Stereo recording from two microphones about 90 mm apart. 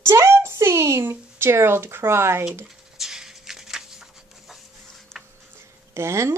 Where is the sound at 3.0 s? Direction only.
5° right (ahead or behind).